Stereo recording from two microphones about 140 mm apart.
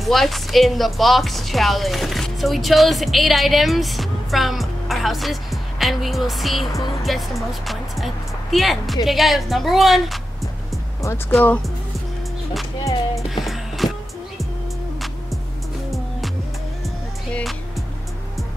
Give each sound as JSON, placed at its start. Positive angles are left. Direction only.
{"t": 0.0, "sound": "speech", "side_deg": 0}
{"t": 11.0, "sound": "speech", "side_deg": 20}
{"t": 11.3, "sound": "speech", "side_deg": 10}
{"t": 13.3, "sound": "music", "side_deg": 0}